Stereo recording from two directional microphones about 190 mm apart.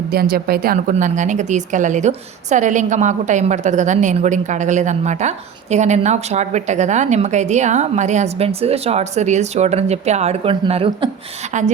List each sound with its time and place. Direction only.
0.1 s a woman's voice: 55° right (ahead or behind)